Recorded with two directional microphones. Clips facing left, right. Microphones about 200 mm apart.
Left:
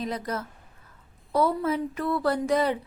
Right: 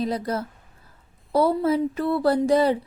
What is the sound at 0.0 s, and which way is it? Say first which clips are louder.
Speech: right 5 dB; 35° right (ahead or behind).